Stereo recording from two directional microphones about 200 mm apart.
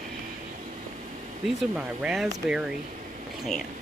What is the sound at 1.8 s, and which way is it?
Speech, 5° right (ahead or behind).